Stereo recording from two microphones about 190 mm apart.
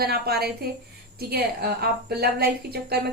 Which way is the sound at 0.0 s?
55° right (ahead or behind).